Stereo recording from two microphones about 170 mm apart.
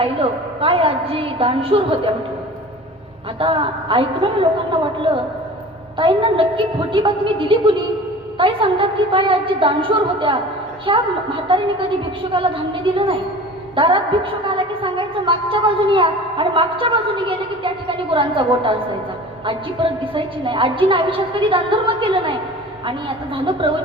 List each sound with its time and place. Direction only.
0.0 s a woman's voice: 35° right (ahead or behind)
3.3 s a woman's voice: 30° right (ahead or behind)